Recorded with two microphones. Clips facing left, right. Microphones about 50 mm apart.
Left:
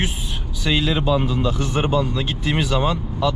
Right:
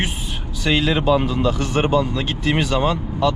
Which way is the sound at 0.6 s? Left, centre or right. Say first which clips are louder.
Right 2 dB; right.